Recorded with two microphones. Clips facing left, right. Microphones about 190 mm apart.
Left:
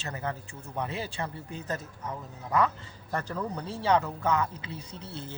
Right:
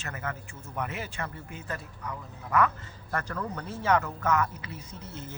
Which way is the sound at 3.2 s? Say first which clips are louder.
Left 1 dB; 10° left (ahead or behind).